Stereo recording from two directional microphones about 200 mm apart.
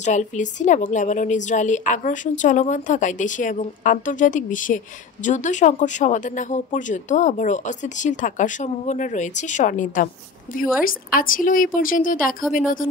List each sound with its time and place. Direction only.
0.0 s a woman's voice: 35° left (ahead or behind)